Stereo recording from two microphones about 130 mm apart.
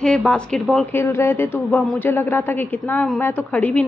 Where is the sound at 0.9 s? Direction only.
20° left (ahead or behind).